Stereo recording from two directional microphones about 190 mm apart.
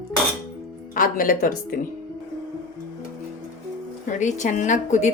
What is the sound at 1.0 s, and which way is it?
Speech, 45° left (ahead or behind).